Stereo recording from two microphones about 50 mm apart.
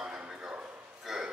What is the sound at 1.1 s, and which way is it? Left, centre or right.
Pig, centre.